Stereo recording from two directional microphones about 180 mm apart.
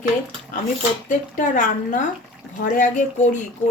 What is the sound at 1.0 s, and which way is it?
Speech, 45° left (ahead or behind).